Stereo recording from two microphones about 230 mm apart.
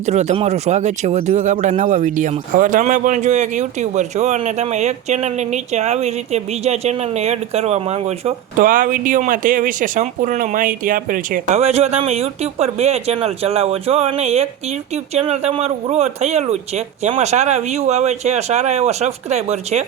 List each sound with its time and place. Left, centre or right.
0.0 s speech: right